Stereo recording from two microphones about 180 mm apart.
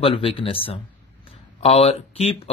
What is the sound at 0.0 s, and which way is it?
Speech, 30° left (ahead or behind).